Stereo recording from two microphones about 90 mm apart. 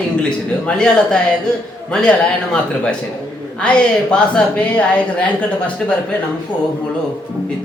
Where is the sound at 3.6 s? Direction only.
10° left (ahead or behind).